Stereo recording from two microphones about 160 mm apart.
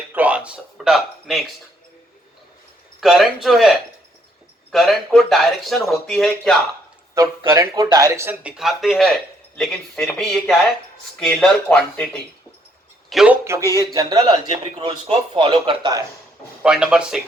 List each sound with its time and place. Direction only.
0.1 s speech: 10° right (ahead or behind)
3.0 s speech: centre (ahead or behind)
7.1 s speech: 20° right (ahead or behind); by 12.2 s 5° left (ahead or behind)
13.1 s a man's voice: 5° right (ahead or behind); by 14.3 s 25° right (ahead or behind)
15.0 s speech: 35° right (ahead or behind)
16.6 s speech: 5° right (ahead or behind)